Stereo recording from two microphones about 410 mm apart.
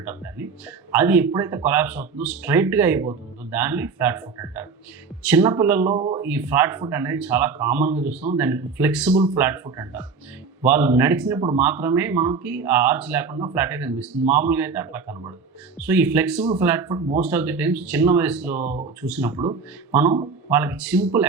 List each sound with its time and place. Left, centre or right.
0.0 s speech: centre
18.6 s speech: centre
19.0 s speech: centre